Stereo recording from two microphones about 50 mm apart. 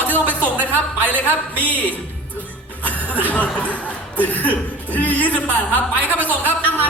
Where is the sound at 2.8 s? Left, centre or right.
Left.